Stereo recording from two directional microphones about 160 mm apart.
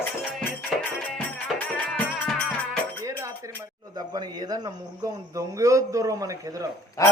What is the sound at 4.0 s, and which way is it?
Speech, 25° right (ahead or behind).